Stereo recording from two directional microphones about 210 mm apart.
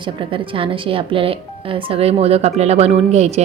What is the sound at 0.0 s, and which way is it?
A woman's voice, 25° right (ahead or behind).